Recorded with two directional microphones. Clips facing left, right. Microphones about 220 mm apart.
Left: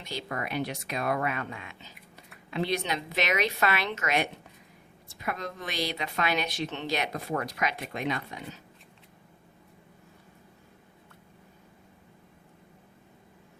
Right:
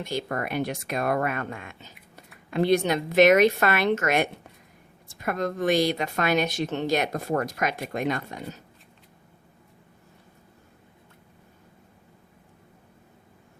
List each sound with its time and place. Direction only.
0.0 s a woman's voice: 50° right (ahead or behind)